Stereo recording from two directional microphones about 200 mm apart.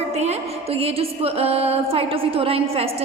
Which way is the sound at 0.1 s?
30° right (ahead or behind).